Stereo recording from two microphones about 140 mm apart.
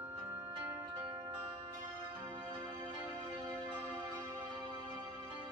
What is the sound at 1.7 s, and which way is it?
Music, 25° right (ahead or behind).